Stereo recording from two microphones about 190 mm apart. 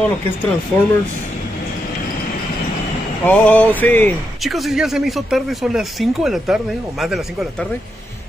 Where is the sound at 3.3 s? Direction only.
5° left (ahead or behind).